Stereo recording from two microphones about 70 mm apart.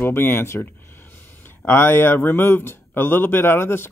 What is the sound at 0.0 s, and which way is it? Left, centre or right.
Speech, left.